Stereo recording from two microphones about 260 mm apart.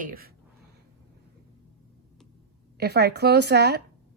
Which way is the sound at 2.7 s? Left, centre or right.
Right.